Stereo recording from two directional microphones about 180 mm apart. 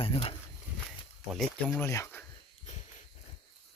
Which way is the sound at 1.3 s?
Centre (ahead or behind).